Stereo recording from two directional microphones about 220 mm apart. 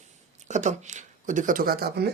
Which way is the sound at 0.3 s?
35° right (ahead or behind).